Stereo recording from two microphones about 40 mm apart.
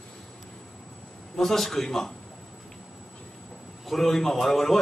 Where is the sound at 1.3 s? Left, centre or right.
Centre.